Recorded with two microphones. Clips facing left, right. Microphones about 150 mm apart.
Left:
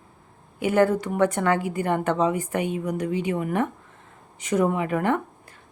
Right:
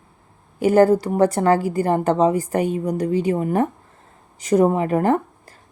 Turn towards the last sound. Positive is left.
turn(degrees=-35)  # may be behind; listen again after turning